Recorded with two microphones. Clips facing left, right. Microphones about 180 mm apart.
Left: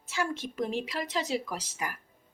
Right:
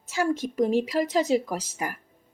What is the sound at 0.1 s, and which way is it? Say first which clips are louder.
A woman's voice: right 7 dB; 40° right (ahead or behind).